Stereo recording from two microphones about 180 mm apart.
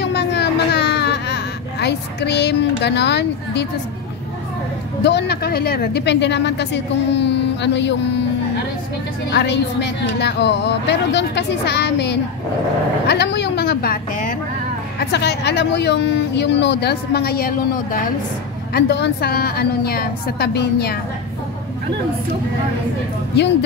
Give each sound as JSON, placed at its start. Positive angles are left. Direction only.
{"t": 0.0, "sound": "baby cry", "side_deg": 70}
{"t": 5.0, "sound": "speech", "side_deg": 70}
{"t": 9.3, "sound": "a woman's voice", "side_deg": 70}
{"t": 15.0, "sound": "speech", "side_deg": 65}
{"t": 18.7, "sound": "a woman's voice", "side_deg": 70}
{"t": 23.3, "sound": "speech", "side_deg": 70}